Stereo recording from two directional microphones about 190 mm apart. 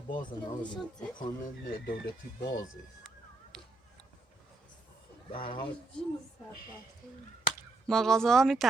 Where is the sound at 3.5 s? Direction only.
5° left (ahead or behind).